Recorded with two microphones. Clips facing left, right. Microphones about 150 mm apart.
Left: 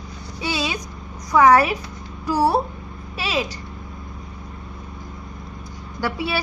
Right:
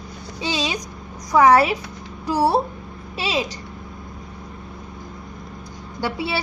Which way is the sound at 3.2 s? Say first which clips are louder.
Right 1 dB; 20° right (ahead or behind).